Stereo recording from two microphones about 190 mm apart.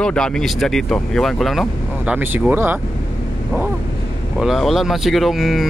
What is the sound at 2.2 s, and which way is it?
Speech, 10° right (ahead or behind).